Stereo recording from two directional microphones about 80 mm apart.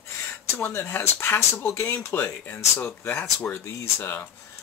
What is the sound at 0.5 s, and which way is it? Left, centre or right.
Speech, left.